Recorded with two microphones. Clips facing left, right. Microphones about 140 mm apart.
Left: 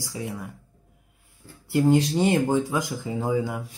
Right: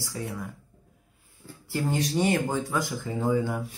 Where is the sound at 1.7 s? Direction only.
20° left (ahead or behind).